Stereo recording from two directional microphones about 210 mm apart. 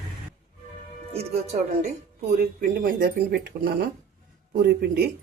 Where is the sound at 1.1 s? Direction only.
30° right (ahead or behind).